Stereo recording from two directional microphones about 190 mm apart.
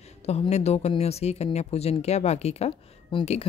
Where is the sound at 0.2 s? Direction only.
35° left (ahead or behind).